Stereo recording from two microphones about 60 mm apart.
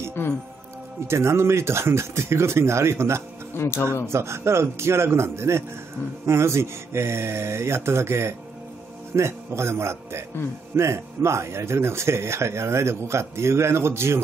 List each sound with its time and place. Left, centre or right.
1.0 s speech: right
3.5 s speech: left
4.1 s speech: right